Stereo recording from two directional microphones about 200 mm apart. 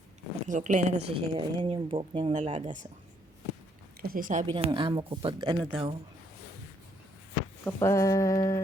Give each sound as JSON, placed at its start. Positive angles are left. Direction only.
{"t": 0.4, "sound": "speech", "side_deg": -40}
{"t": 4.0, "sound": "speech", "side_deg": -45}
{"t": 4.5, "sound": "speech", "side_deg": -25}
{"t": 7.6, "sound": "speech", "side_deg": 15}